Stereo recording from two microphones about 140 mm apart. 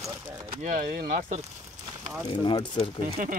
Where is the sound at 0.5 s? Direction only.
70° right (ahead or behind).